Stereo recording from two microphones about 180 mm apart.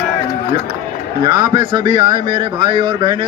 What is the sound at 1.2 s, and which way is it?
Speech, 25° right (ahead or behind).